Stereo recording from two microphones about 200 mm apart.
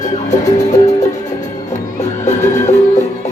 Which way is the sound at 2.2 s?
35° left (ahead or behind).